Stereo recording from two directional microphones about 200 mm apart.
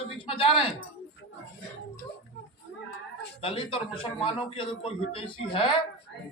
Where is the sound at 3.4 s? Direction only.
25° left (ahead or behind).